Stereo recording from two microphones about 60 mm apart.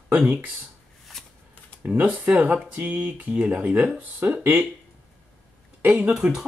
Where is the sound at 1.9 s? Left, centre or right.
Right.